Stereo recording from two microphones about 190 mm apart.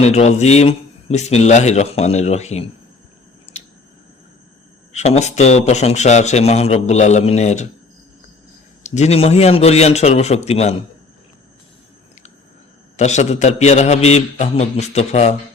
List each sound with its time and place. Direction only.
0.0 s a man's voice: 35° left (ahead or behind)
4.9 s a man's voice: 35° left (ahead or behind)
8.8 s a man's voice: 35° left (ahead or behind)
13.0 s a man's voice: 35° left (ahead or behind)